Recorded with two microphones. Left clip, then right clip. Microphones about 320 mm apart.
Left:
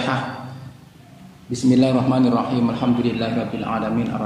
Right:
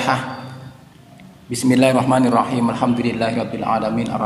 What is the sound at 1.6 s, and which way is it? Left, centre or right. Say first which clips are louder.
A man's voice: right 3 dB; right.